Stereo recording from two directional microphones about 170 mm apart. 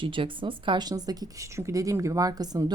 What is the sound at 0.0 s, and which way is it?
A woman's voice, 30° right (ahead or behind).